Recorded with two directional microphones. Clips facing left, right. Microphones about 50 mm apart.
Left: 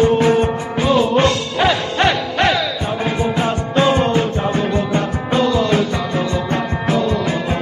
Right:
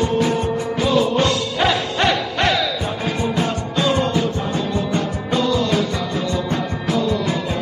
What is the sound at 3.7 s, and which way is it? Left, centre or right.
Music, left.